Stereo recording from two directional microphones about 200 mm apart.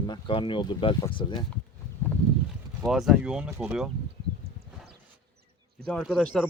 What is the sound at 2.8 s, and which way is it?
Speech, centre (ahead or behind).